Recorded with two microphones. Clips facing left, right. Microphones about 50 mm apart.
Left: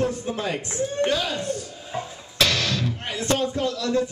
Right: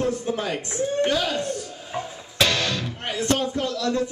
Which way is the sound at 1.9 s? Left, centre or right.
Centre.